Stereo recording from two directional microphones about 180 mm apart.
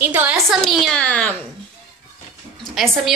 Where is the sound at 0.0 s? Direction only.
10° right (ahead or behind).